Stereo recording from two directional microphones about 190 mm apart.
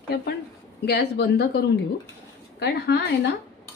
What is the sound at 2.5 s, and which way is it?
Speech, 60° left (ahead or behind).